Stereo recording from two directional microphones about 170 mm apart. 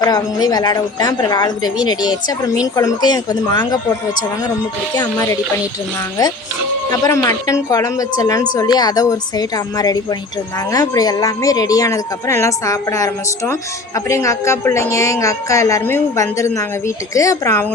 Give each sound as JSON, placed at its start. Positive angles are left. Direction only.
{"t": 0.0, "sound": "speech", "side_deg": 25}
{"t": 4.9, "sound": "speech", "side_deg": 20}
{"t": 6.9, "sound": "speech", "side_deg": 20}